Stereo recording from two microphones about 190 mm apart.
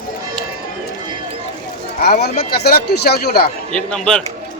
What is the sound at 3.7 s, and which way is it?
Speech, 5° left (ahead or behind).